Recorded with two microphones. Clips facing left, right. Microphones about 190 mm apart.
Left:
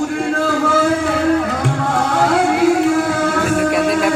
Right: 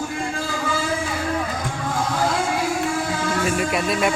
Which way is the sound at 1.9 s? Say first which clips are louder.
Left 6 dB; 70° left (ahead or behind).